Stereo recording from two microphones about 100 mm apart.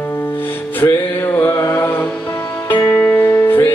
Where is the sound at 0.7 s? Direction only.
20° left (ahead or behind).